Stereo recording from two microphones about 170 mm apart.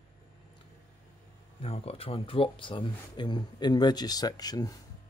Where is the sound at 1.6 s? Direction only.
35° left (ahead or behind).